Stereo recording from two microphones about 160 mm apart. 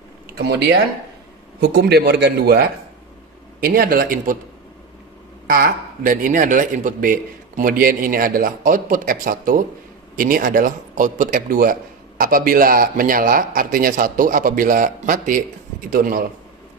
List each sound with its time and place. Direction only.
0.4 s a man's voice: 90° right
3.6 s speech: 65° right (ahead or behind)
5.5 s speech: 65° right (ahead or behind)